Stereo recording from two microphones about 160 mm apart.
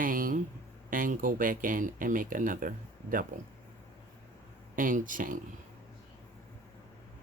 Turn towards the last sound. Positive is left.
turn(degrees=-55)  # may be behind; listen again after turning